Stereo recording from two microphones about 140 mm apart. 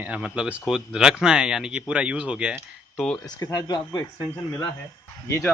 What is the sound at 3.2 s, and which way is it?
Speech, 25° left (ahead or behind).